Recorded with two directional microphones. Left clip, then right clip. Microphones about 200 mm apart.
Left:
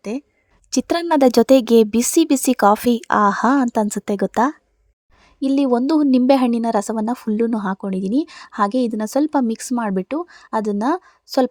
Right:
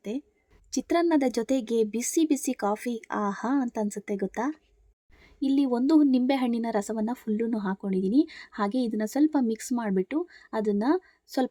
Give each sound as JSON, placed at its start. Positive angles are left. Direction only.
{"t": 0.7, "sound": "a woman's voice", "side_deg": 45}